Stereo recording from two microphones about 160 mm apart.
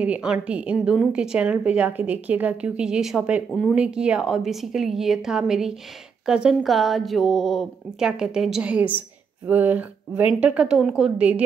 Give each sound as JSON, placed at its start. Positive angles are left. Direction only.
{"t": 0.0, "sound": "a woman's voice", "side_deg": -5}